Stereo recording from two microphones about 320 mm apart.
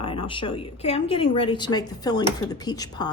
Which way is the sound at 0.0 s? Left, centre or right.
Centre.